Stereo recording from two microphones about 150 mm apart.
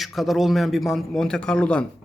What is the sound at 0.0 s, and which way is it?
A man's voice, centre (ahead or behind).